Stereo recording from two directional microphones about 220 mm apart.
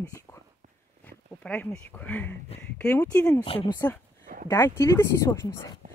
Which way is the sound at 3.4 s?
25° left (ahead or behind).